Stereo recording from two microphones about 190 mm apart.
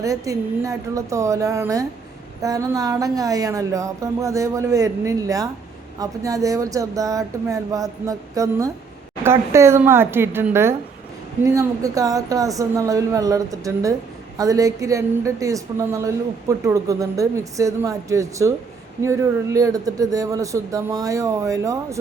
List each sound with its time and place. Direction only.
0.0 s speech: 15° right (ahead or behind)